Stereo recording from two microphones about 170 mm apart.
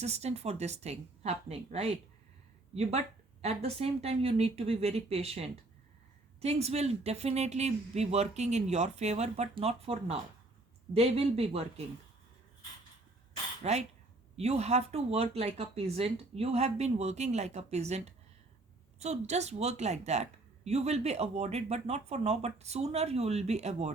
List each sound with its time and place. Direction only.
0.0 s speech: 40° right (ahead or behind)
3.4 s speech: 40° right (ahead or behind)
13.6 s speech: 40° right (ahead or behind)